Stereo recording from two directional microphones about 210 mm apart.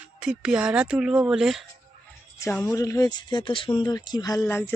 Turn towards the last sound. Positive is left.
turn(degrees=10)  # may be behind; listen again after turning